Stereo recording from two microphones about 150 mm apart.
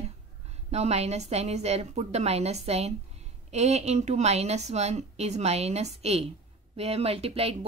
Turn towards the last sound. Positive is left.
turn(degrees=-40)  # may be behind; listen again after turning